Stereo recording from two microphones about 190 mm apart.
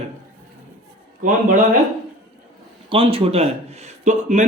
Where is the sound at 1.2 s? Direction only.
40° right (ahead or behind).